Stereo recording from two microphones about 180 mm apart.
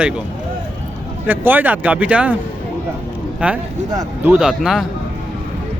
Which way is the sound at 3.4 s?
10° right (ahead or behind).